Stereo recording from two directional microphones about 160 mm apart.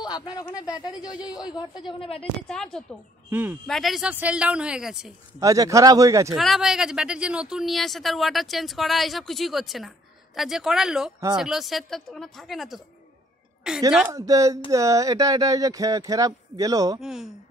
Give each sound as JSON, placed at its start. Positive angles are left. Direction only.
{"t": 0.0, "sound": "a woman's voice", "side_deg": 25}
{"t": 1.0, "sound": "a man's voice", "side_deg": -5}
{"t": 1.3, "sound": "a woman's voice", "side_deg": 25}
{"t": 2.4, "sound": "a woman's voice", "side_deg": 5}
{"t": 3.3, "sound": "speech", "side_deg": -10}
{"t": 3.6, "sound": "a woman's voice", "side_deg": 0}
{"t": 5.4, "sound": "speech", "side_deg": -20}
{"t": 6.3, "sound": "a woman's voice", "side_deg": 0}
{"t": 14.0, "sound": "speech", "side_deg": -20}
{"t": 17.0, "sound": "a woman's voice", "side_deg": 0}